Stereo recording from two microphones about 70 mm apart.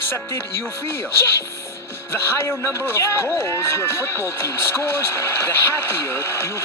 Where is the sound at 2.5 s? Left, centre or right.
Left.